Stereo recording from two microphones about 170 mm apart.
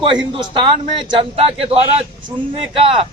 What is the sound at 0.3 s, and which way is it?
A man's voice, 30° right (ahead or behind).